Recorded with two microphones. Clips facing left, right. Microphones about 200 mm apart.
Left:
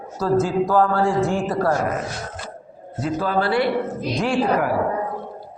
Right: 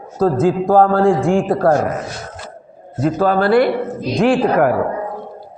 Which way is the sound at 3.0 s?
50° right (ahead or behind).